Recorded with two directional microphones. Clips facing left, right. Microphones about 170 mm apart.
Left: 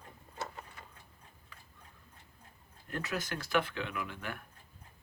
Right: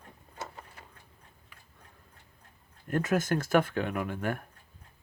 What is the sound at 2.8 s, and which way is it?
Speech, 50° right (ahead or behind).